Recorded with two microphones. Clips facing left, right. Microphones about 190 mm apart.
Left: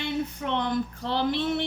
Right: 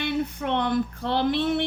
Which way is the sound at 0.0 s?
60° right (ahead or behind).